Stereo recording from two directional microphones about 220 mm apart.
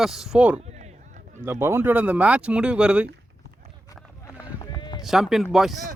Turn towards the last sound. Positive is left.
turn(degrees=0)  # may be behind; listen again after turning